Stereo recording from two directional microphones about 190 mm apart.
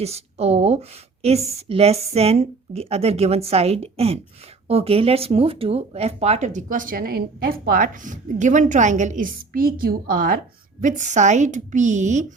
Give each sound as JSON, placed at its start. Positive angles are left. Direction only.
{"t": 0.0, "sound": "speech", "side_deg": -35}